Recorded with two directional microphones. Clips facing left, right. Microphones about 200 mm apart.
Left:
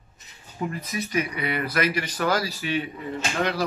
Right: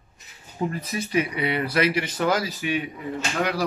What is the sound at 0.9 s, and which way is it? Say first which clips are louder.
Speech: right 2 dB; 30° right (ahead or behind).